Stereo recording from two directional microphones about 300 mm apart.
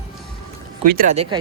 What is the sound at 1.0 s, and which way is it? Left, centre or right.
Speech, right.